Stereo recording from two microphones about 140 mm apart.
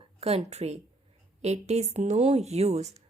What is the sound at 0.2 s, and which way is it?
Speech, 50° right (ahead or behind).